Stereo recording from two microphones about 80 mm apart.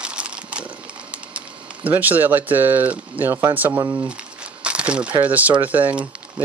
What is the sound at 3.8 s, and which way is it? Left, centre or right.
Speech, right.